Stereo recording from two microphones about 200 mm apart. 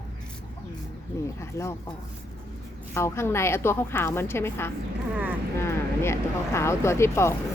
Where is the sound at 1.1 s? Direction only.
15° left (ahead or behind).